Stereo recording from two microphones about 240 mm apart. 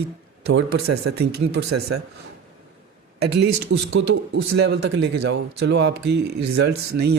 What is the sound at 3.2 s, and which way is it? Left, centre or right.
A man's voice, right.